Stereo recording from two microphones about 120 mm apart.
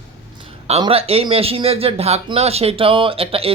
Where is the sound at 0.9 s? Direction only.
55° right (ahead or behind).